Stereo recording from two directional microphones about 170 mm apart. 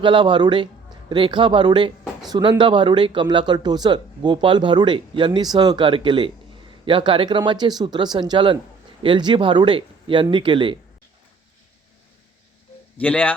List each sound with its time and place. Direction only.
0.0 s speech: 30° right (ahead or behind)
13.0 s speech: 10° left (ahead or behind)